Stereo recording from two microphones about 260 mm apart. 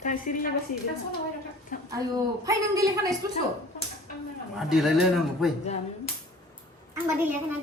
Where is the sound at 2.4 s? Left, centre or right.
Centre.